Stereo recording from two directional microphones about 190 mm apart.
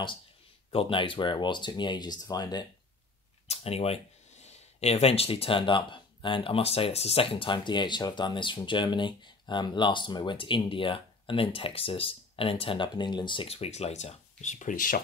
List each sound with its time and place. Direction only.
0.7 s speech: 25° left (ahead or behind)
3.4 s speech: 30° left (ahead or behind)